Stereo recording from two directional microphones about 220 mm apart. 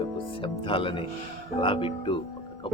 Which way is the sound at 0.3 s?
25° left (ahead or behind).